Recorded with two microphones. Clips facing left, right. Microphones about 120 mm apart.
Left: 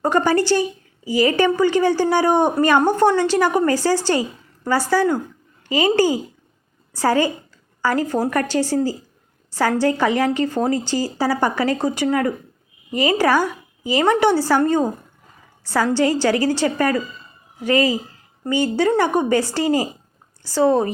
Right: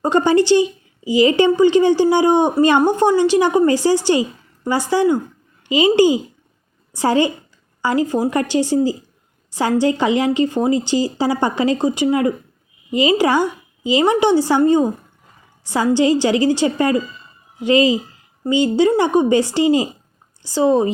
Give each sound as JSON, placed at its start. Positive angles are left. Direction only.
{"t": 0.0, "sound": "a woman's voice", "side_deg": -20}